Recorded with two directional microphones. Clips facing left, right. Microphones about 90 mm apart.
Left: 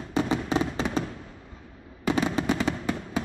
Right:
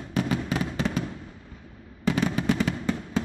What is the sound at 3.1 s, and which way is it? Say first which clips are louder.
Fireworks: right 3 dB; 10° left (ahead or behind).